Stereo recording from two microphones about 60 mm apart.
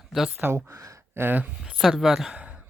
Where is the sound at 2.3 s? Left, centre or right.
Right.